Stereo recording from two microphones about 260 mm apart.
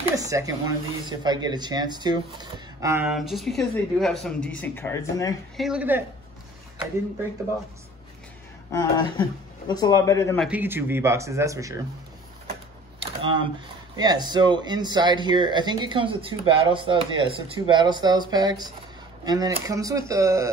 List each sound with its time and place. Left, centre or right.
0.0 s speech: centre
5.6 s a woman's voice: centre
8.7 s speech: centre
10.4 s speech: centre
13.0 s a sound: centre
13.9 s speech: centre